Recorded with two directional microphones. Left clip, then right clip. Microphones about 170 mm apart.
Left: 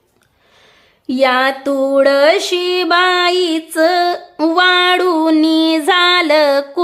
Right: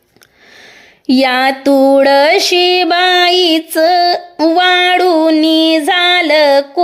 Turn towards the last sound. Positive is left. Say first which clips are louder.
# right 3 dB
turn(degrees=0)  # may be behind; listen again after turning